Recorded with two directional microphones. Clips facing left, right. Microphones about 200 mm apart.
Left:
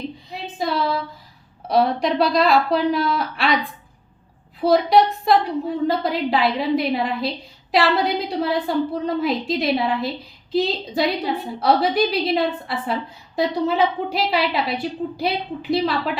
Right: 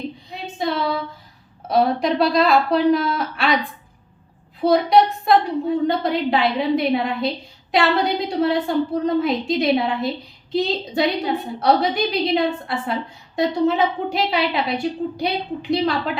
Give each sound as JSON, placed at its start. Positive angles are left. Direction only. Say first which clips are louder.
{"t": 0.6, "sound": "a sound", "louder": "even", "side_deg": 0}
{"t": 1.6, "sound": "a woman's voice", "louder": "even", "side_deg": 0}
{"t": 4.6, "sound": "a woman's voice", "louder": "even", "side_deg": 0}